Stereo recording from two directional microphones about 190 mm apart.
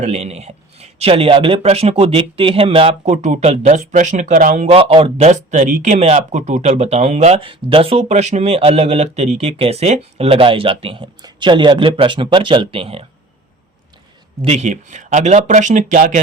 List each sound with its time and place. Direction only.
0.0 s a man's voice: 35° right (ahead or behind)
14.4 s a man's voice: 35° right (ahead or behind)